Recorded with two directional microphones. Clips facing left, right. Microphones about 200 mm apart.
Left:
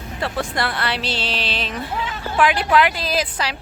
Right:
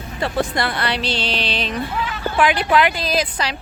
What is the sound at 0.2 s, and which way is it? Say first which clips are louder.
A woman's voice: right 3 dB; centre (ahead or behind).